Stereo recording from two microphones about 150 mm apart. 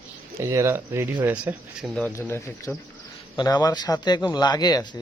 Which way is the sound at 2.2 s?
15° left (ahead or behind).